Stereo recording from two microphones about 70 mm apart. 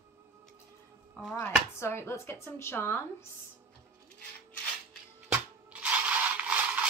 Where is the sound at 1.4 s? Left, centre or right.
Left.